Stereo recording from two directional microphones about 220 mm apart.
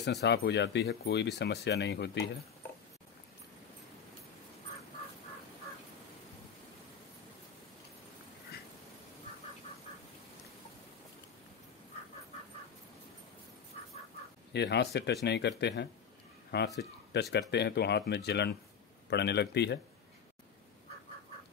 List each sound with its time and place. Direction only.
0.0 s speech: 50° left (ahead or behind)
13.7 s bird: 25° left (ahead or behind)
14.5 s speech: 50° left (ahead or behind)